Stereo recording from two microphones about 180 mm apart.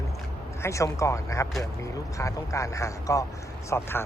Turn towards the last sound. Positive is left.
turn(degrees=15)  # may be behind; listen again after turning